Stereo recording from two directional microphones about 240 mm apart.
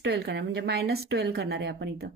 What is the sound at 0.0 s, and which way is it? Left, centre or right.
Speech, right.